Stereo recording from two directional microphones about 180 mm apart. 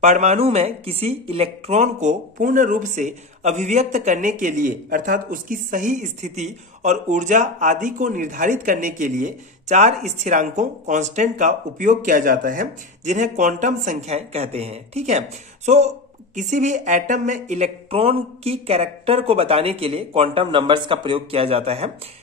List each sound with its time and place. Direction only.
0.0 s a woman's voice: 40° right (ahead or behind)